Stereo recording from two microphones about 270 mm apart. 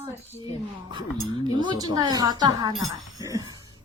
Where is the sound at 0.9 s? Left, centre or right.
Centre.